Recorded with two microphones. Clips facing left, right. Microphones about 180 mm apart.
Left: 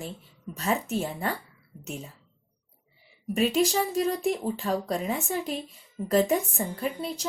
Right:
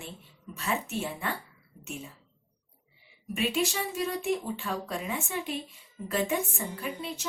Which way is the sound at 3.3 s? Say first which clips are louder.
Left 6 dB; 40° left (ahead or behind).